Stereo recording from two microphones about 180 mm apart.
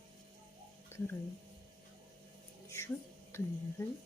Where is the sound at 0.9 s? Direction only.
15° left (ahead or behind).